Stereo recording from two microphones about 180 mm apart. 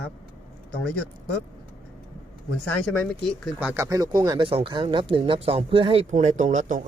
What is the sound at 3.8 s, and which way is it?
Speech, 20° right (ahead or behind).